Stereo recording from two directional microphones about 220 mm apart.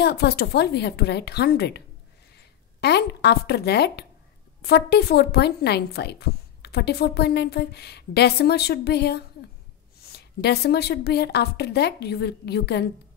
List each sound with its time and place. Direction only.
0.0 s a woman's voice: 45° left (ahead or behind)
2.8 s a woman's voice: 50° left (ahead or behind)